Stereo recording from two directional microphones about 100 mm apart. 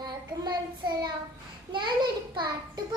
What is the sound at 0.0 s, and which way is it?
Child singing, 45° right (ahead or behind).